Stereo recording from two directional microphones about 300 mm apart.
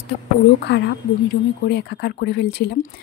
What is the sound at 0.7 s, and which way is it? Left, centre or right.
A woman's voice, left.